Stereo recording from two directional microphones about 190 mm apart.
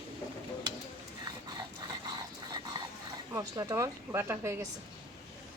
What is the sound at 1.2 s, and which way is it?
Dog, 20° right (ahead or behind).